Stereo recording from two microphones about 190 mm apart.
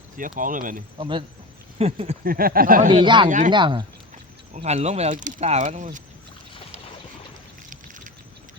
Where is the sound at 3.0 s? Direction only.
25° right (ahead or behind).